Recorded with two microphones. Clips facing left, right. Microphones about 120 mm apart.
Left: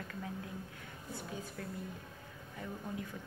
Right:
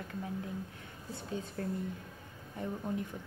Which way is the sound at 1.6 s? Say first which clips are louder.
Right 10 dB; 40° right (ahead or behind).